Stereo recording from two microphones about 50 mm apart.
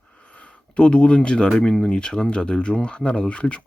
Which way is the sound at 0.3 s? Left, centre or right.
Left.